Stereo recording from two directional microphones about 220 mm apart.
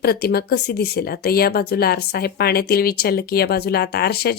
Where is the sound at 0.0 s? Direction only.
45° left (ahead or behind).